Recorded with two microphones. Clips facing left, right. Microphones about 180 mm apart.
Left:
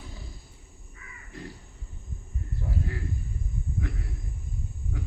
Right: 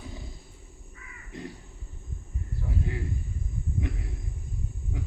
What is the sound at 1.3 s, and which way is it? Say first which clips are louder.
Crow: right 2 dB; 20° right (ahead or behind).